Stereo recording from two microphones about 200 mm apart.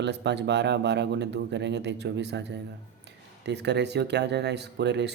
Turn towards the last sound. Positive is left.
turn(degrees=-60)  # may be behind; listen again after turning